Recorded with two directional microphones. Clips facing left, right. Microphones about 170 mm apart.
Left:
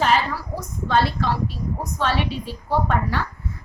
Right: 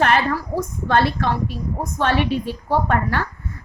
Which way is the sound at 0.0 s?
60° right (ahead or behind).